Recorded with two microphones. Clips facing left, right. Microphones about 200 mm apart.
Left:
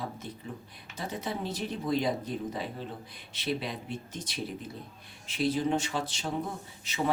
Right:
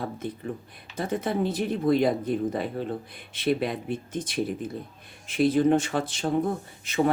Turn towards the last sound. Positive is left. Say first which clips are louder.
# right 11 dB
turn(degrees=-50)  # may be behind; listen again after turning